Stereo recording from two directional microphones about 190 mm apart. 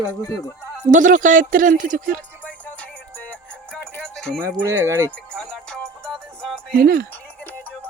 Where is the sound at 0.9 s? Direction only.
45° right (ahead or behind).